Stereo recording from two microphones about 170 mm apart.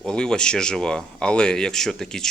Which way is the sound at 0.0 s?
5° left (ahead or behind).